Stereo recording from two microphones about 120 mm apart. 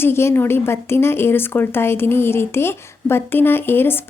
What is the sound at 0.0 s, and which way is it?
A woman's voice, 20° left (ahead or behind).